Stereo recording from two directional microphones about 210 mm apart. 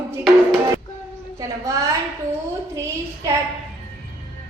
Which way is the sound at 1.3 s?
15° right (ahead or behind).